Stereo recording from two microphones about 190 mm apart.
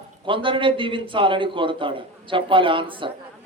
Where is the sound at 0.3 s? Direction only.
25° right (ahead or behind).